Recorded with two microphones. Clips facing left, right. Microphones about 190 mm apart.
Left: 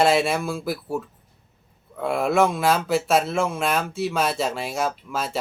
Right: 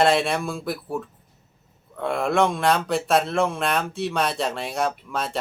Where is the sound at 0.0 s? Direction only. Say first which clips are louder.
Left 1 dB; centre (ahead or behind).